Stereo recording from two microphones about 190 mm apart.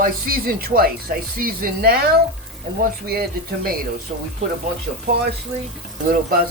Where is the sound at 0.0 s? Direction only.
50° right (ahead or behind).